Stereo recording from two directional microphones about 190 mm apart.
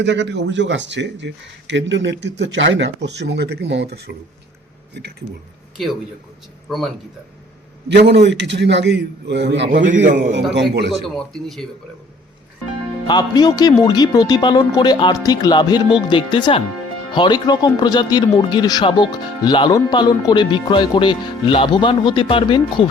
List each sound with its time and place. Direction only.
0.0 s speech: 65° right (ahead or behind)
5.7 s a man's voice: centre (ahead or behind)
7.9 s a man's voice: 60° right (ahead or behind)
11.1 s speech: centre (ahead or behind)
13.1 s speech: 20° left (ahead or behind)